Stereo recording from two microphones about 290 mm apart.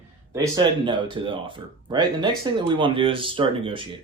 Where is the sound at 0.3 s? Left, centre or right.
Centre.